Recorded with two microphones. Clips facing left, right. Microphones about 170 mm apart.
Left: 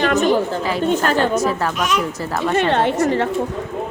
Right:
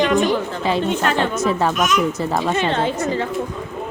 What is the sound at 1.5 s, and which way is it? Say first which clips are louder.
Speech: right 2 dB; 25° right (ahead or behind).